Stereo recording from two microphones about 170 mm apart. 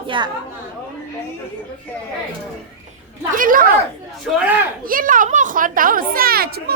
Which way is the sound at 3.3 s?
55° right (ahead or behind).